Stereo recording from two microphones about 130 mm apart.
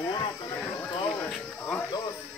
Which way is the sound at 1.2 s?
10° left (ahead or behind).